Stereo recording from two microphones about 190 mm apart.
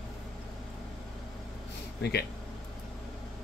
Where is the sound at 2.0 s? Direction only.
55° left (ahead or behind).